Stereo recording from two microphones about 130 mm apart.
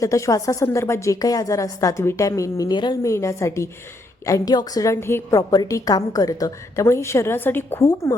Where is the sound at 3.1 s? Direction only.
25° left (ahead or behind).